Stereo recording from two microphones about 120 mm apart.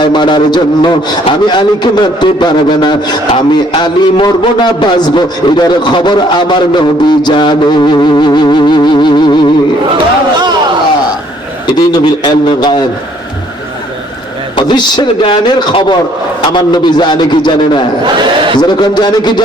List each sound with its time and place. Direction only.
0.0 s a man's voice: 40° left (ahead or behind)
11.9 s a man's voice: 40° left (ahead or behind)
14.5 s a man's voice: 40° left (ahead or behind)
18.0 s speech: 45° right (ahead or behind)
18.6 s a man's voice: 35° left (ahead or behind)